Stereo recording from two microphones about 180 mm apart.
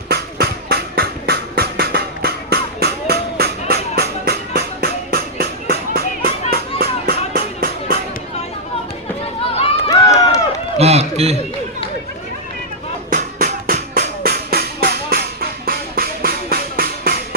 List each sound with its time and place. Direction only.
0.1 s music: 60° right (ahead or behind)
9.9 s run: 20° left (ahead or behind)
10.8 s a sound: 35° right (ahead or behind)
13.1 s music: 50° right (ahead or behind)